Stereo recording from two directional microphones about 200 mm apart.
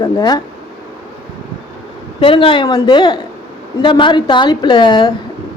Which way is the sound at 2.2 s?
25° left (ahead or behind).